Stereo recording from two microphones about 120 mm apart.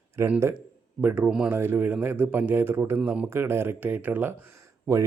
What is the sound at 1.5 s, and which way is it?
Speech, 20° right (ahead or behind).